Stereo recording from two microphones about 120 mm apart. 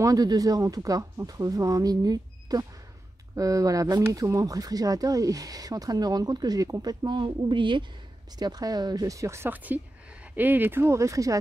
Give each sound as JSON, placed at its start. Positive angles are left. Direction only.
{"t": 0.0, "sound": "speech", "side_deg": -30}